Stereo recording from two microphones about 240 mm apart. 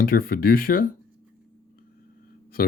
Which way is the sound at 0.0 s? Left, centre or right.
Left.